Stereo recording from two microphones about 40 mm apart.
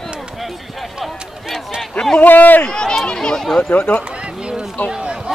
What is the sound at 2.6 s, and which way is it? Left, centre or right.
Speech, centre.